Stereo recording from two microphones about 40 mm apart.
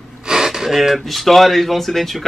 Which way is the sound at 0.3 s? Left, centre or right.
Centre.